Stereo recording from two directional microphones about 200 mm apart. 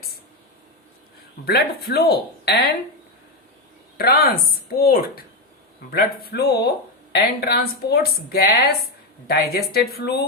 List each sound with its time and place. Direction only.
1.5 s speech: 50° left (ahead or behind)
3.9 s a woman's voice: 50° left (ahead or behind)